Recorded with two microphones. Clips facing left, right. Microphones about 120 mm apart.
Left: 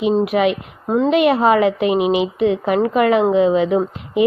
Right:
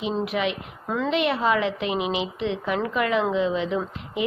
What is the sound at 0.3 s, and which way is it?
Speech, 60° left (ahead or behind).